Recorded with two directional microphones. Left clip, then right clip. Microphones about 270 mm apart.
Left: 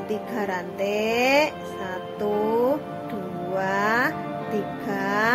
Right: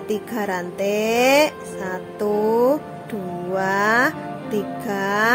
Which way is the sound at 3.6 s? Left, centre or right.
Right.